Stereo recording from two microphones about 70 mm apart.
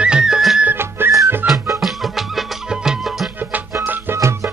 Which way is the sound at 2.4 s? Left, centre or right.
Centre.